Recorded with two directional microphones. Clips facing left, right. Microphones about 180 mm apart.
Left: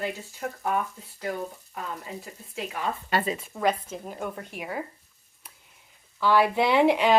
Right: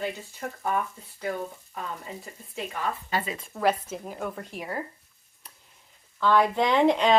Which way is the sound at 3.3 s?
5° left (ahead or behind).